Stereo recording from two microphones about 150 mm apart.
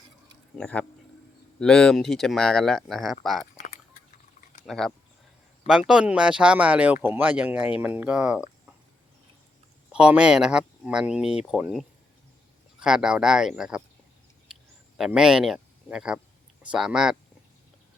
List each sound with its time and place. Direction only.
0.6 s speech: 10° left (ahead or behind)
4.6 s speech: centre (ahead or behind)
5.9 s speech: 5° right (ahead or behind)
9.9 s speech: 5° right (ahead or behind)
14.5 s a sound: 5° right (ahead or behind)
16.7 s speech: 5° right (ahead or behind)